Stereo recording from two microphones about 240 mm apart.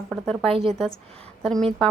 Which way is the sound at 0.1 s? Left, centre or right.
Centre.